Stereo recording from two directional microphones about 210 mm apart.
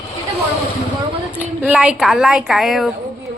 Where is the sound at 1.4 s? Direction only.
5° right (ahead or behind).